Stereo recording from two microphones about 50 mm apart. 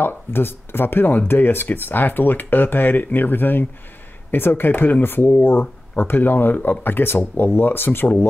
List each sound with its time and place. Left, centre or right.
0.0 s speech: left